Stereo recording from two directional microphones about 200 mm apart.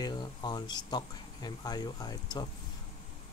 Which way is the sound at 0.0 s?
20° left (ahead or behind).